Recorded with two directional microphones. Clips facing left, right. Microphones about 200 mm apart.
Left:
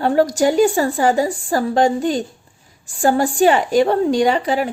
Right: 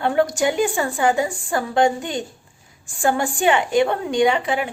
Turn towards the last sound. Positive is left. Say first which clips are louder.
# left 2 dB
turn(degrees=40)  # may be behind; listen again after turning